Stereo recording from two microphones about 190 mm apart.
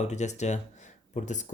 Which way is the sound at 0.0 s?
35° left (ahead or behind).